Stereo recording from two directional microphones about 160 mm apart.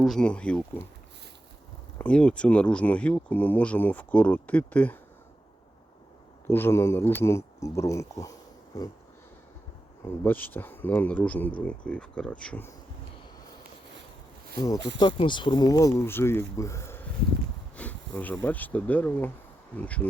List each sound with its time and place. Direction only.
0.0 s speech: 5° left (ahead or behind)
2.0 s speech: 5° left (ahead or behind)
6.5 s speech: 15° left (ahead or behind)
10.0 s speech: 15° left (ahead or behind)
14.9 s speech: 30° left (ahead or behind); by 20.0 s 10° left (ahead or behind)